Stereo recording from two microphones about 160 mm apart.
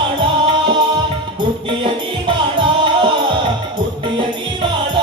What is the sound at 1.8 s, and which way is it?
Music, 30° right (ahead or behind).